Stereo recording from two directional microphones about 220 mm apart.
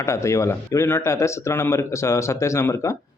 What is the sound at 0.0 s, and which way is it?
Speech, 15° left (ahead or behind).